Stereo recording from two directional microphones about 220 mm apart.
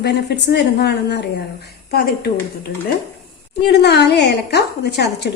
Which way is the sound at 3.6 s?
50° left (ahead or behind).